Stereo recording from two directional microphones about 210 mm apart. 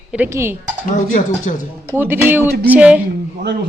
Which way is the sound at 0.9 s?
35° left (ahead or behind).